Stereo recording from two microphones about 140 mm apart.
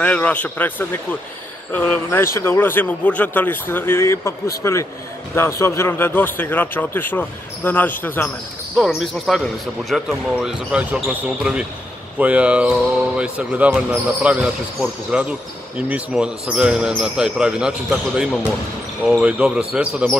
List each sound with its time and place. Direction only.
0.0 s a man's voice: 10° left (ahead or behind)
8.7 s speech: centre (ahead or behind)